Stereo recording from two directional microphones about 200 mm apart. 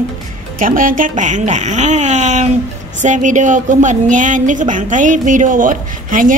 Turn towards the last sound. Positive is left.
turn(degrees=-40)  # may be behind; listen again after turning